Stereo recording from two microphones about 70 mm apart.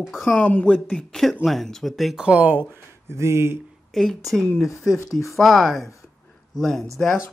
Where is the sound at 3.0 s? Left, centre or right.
Right.